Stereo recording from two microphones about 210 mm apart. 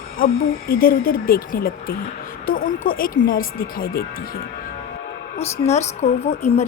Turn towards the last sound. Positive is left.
turn(degrees=30)  # may be behind; listen again after turning